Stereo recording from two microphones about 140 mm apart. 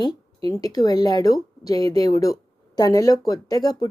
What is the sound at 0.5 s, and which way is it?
Speech, 25° left (ahead or behind).